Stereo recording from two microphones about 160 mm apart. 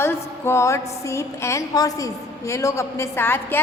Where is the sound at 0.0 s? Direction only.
15° left (ahead or behind).